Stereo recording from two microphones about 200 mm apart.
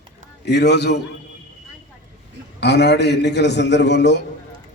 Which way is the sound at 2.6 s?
55° left (ahead or behind).